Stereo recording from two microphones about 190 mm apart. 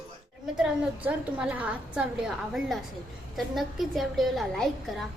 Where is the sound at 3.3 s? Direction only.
Centre (ahead or behind).